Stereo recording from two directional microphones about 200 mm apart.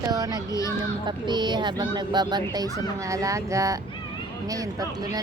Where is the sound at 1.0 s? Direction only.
20° right (ahead or behind).